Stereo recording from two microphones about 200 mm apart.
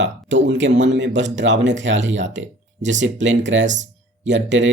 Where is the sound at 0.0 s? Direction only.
65° right (ahead or behind).